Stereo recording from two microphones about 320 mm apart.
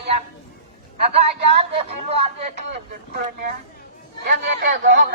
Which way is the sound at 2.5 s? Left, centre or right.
Right.